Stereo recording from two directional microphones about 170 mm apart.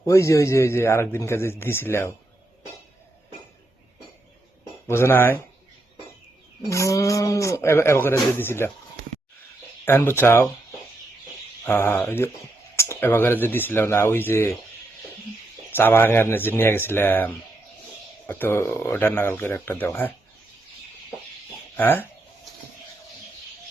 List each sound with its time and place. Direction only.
0.0 s a man's voice: 15° left (ahead or behind)
4.9 s a man's voice: 15° left (ahead or behind)
6.7 s a man's voice: 20° left (ahead or behind)
9.8 s a man's voice: 15° left (ahead or behind)
11.6 s a man's voice: 15° left (ahead or behind)
15.7 s a man's voice: 15° left (ahead or behind)
21.8 s speech: 10° left (ahead or behind)